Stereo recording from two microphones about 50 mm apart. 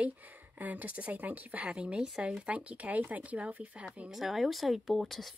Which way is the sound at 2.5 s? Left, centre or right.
Right.